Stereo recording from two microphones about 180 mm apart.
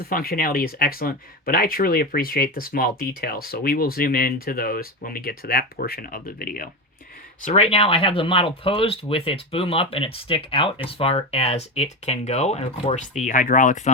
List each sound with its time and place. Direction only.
0.1 s speech: 55° left (ahead or behind)
7.4 s speech: 35° left (ahead or behind)